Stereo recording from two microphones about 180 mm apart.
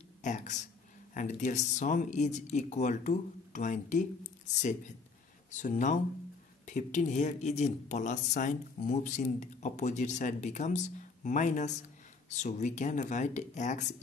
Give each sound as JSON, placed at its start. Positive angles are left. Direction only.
{"t": 0.2, "sound": "speech", "side_deg": 40}